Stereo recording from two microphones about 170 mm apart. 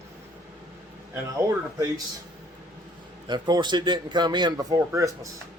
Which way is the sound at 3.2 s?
25° right (ahead or behind).